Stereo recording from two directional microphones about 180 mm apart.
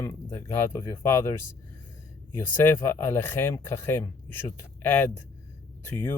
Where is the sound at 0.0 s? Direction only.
15° left (ahead or behind).